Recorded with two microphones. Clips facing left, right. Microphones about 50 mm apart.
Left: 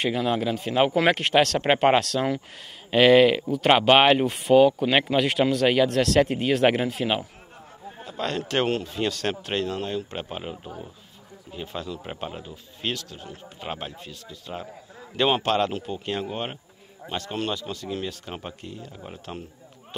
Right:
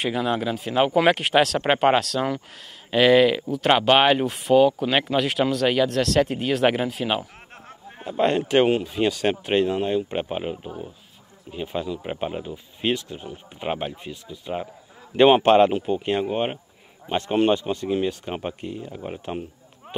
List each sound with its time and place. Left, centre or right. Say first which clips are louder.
0.0 s speech: even; centre
8.0 s a man's voice: right 8 dB; right